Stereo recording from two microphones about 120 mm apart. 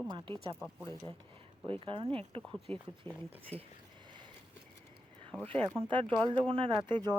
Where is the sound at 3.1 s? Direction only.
20° left (ahead or behind).